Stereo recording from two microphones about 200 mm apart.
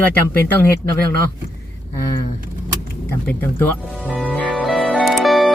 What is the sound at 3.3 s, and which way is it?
Speech, 10° left (ahead or behind).